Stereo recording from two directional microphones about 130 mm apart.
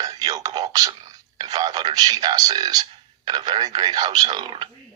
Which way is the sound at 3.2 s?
35° right (ahead or behind).